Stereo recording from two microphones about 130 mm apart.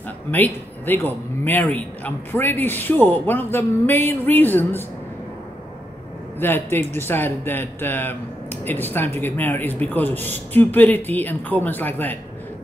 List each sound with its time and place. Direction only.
0.3 s speech: 15° left (ahead or behind)
6.4 s speech: 15° left (ahead or behind)